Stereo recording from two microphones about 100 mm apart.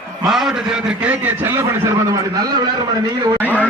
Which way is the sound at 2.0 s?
40° right (ahead or behind).